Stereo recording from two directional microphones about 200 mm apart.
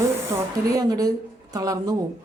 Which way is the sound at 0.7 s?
20° right (ahead or behind).